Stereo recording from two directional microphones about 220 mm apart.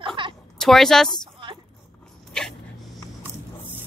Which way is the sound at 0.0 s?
20° right (ahead or behind).